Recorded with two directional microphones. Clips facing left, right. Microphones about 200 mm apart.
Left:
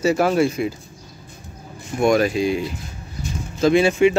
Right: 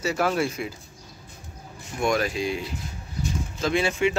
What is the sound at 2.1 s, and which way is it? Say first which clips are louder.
Speech: left 7 dB; 10° left (ahead or behind).